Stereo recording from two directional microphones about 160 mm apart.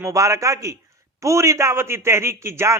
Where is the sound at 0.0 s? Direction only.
20° right (ahead or behind).